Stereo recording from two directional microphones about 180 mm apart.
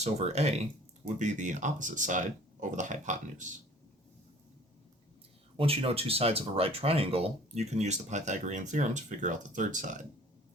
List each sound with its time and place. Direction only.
0.0 s speech: 35° right (ahead or behind)
5.5 s speech: 30° right (ahead or behind)